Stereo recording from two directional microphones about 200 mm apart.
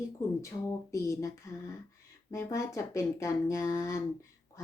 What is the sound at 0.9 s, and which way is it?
Speech, 15° left (ahead or behind).